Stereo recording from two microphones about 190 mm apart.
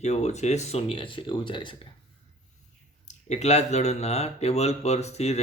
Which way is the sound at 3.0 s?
35° left (ahead or behind).